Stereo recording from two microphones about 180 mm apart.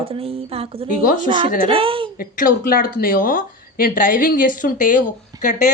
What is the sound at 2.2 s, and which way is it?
Speech, 50° left (ahead or behind).